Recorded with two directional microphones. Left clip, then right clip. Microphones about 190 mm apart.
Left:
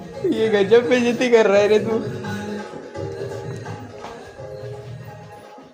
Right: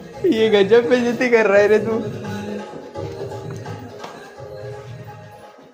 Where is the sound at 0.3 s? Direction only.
25° right (ahead or behind).